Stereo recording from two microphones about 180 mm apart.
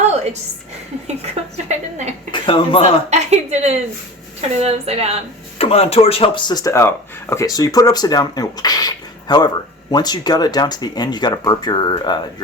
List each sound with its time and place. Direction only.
1.0 s a sound: 40° right (ahead or behind)
2.3 s speech: 30° left (ahead or behind)
3.1 s a woman's voice: 40° right (ahead or behind)
5.5 s speech: 35° left (ahead or behind)